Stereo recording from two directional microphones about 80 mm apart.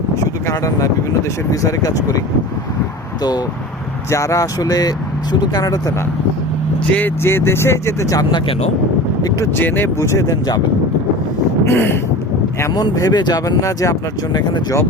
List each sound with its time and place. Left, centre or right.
0.4 s speech: left
4.1 s speech: left
7.2 s speech: left
9.6 s speech: left
10.0 s speech: left
11.6 s wind noise: left
12.7 s speech: left
13.4 s speech: left